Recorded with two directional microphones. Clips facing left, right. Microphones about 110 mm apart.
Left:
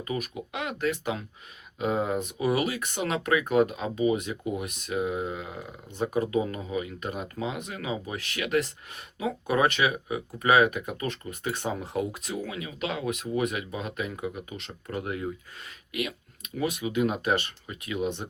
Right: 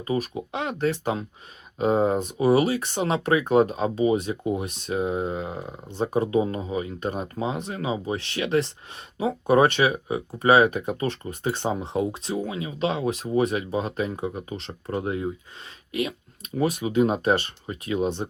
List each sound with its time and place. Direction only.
0.0 s speech: 30° right (ahead or behind)